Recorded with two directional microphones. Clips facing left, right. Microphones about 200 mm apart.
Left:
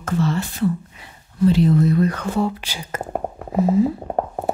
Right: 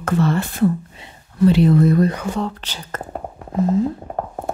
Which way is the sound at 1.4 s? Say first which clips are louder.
Right 2 dB; 70° right (ahead or behind).